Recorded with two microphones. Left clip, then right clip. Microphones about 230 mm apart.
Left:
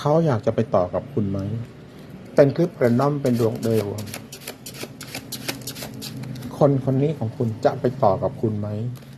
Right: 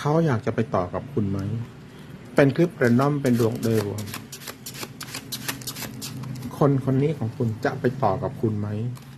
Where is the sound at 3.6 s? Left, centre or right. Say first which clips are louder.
Left 2 dB; centre.